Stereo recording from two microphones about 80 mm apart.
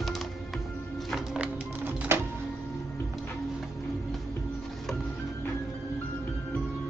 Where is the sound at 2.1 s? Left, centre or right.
Right.